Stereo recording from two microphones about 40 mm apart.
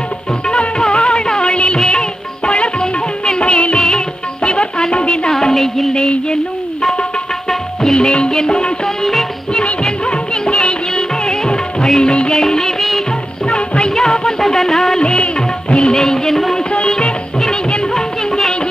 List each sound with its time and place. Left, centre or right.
0.5 s music of bollywood: left
1.9 s music: left
5.3 s music: centre
7.4 s music: centre
8.1 s music: left
9.5 s music of bollywood: centre
12.4 s music: centre
13.6 s music: left
14.4 s a sound: centre
15.0 s music: left
16.0 s music: centre
16.5 s music: left
17.9 s music: centre